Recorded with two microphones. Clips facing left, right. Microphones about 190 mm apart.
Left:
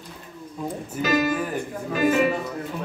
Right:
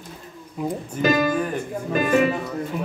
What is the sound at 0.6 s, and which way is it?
Speech, 15° right (ahead or behind).